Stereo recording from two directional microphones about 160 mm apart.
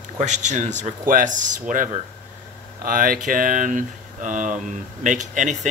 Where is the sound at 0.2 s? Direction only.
45° right (ahead or behind).